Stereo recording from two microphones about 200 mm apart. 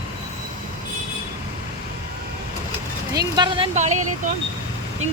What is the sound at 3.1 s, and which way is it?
Speech, 20° right (ahead or behind).